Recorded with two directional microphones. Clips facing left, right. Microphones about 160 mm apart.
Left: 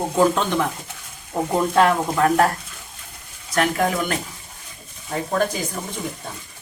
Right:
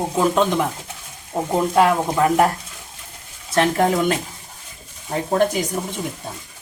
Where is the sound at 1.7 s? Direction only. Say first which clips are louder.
Right 1 dB; 10° right (ahead or behind).